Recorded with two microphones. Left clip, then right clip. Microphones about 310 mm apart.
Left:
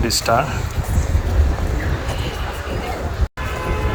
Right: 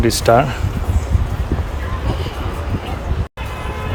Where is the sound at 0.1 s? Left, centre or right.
Right.